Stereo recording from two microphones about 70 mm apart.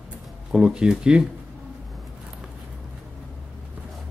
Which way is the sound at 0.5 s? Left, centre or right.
Centre.